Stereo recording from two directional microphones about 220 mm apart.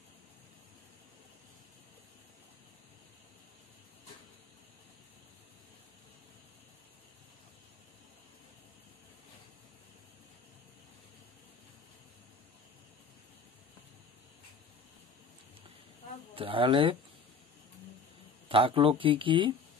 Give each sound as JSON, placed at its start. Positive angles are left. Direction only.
{"t": 16.3, "sound": "speech", "side_deg": -25}
{"t": 18.5, "sound": "speech", "side_deg": -25}